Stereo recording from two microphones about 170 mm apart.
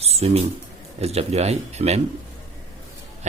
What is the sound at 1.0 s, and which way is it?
Speech, 40° right (ahead or behind).